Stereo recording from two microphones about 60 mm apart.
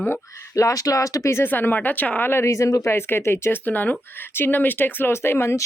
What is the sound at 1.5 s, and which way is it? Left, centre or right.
Speech, left.